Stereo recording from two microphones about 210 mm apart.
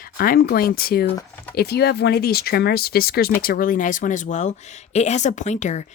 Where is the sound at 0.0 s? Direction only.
45° left (ahead or behind).